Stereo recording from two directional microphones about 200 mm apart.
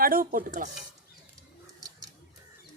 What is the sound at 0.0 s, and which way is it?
Speech, 45° right (ahead or behind).